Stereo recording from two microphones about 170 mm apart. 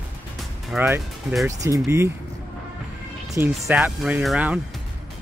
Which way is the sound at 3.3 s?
15° right (ahead or behind).